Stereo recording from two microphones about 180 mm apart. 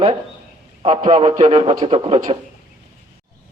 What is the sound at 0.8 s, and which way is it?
Speech, 35° right (ahead or behind).